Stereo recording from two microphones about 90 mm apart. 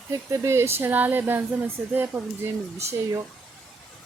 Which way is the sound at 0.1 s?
35° right (ahead or behind).